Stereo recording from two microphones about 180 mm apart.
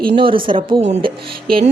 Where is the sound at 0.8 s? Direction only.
40° right (ahead or behind).